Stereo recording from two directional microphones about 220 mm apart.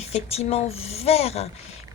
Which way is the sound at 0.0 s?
30° left (ahead or behind).